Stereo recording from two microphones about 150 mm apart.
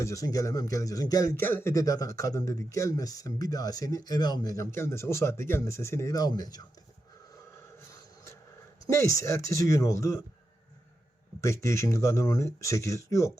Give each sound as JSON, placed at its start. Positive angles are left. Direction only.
{"t": 0.0, "sound": "speech", "side_deg": 20}
{"t": 7.8, "sound": "a sound", "side_deg": 20}
{"t": 8.9, "sound": "speech", "side_deg": 20}
{"t": 11.3, "sound": "speech", "side_deg": 20}